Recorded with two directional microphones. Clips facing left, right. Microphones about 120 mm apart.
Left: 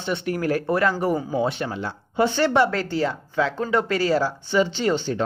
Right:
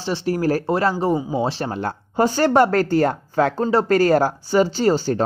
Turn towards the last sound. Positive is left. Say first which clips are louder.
# right 4 dB
turn(degrees=-40)  # may be behind; listen again after turning